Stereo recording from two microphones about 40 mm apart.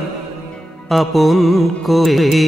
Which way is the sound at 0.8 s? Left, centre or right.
Centre.